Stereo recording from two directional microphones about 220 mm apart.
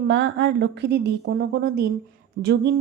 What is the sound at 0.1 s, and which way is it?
Speech, 50° right (ahead or behind).